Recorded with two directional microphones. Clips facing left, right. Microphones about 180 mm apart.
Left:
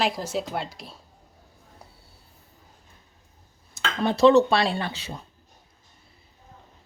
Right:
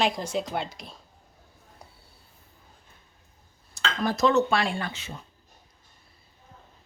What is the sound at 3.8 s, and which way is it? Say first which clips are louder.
Speech: left 4 dB; 30° left (ahead or behind).